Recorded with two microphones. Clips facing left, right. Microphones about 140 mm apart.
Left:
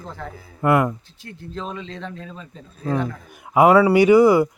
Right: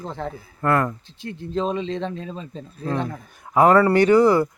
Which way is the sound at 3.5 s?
10° left (ahead or behind).